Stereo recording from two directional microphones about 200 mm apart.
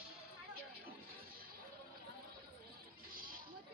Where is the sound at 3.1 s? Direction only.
45° right (ahead or behind).